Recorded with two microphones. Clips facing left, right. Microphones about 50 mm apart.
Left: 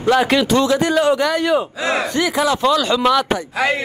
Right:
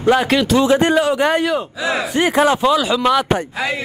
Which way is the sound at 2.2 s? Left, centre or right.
Right.